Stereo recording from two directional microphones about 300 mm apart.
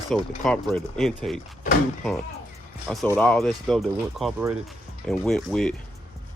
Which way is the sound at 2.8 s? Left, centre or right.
Centre.